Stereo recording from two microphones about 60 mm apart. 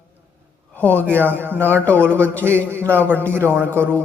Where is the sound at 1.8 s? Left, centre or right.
Left.